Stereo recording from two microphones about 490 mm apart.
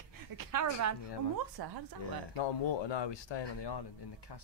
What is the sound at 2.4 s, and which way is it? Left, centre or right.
Speech, left.